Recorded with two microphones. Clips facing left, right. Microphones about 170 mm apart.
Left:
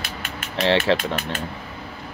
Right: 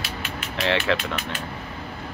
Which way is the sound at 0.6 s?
30° left (ahead or behind).